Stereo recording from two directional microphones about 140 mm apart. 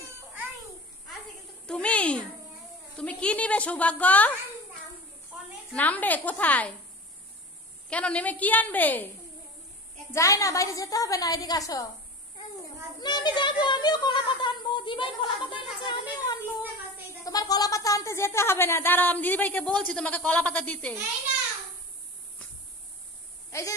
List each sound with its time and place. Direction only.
1.7 s a sound: 10° left (ahead or behind)
3.0 s speech: 10° left (ahead or behind)
5.7 s speech: 10° left (ahead or behind)
7.9 s speech: 10° left (ahead or behind)
10.1 s a woman's voice: 20° left (ahead or behind)
13.0 s speech: 30° left (ahead or behind)
15.8 s a sound: 35° left (ahead or behind)
17.2 s speech: 25° left (ahead or behind); by 20.9 s 10° left (ahead or behind)
23.5 s speech: 20° left (ahead or behind)